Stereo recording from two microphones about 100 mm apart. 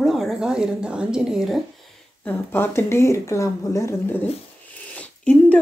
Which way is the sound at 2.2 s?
20° left (ahead or behind).